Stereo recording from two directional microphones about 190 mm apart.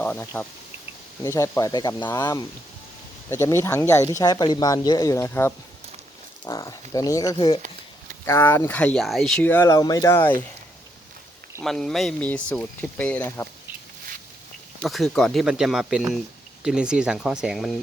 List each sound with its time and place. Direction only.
0.0 s speech: 10° left (ahead or behind)
8.2 s speech: 10° left (ahead or behind)
11.6 s speech: centre (ahead or behind)
14.8 s speech: centre (ahead or behind)